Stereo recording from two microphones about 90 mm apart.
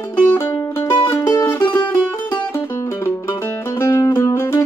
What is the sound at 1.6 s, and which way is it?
Music, 50° left (ahead or behind).